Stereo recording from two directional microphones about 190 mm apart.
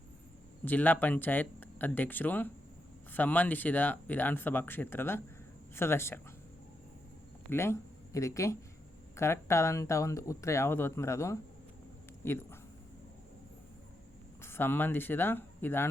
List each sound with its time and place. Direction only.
0.6 s speech: 10° left (ahead or behind)
7.5 s speech: 15° left (ahead or behind)
14.4 s speech: 10° left (ahead or behind)